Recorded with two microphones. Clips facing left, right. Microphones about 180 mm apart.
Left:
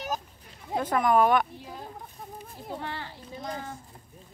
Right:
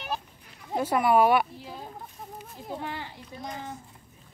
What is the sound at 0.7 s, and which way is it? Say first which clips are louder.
Speech: right 1 dB; 10° right (ahead or behind).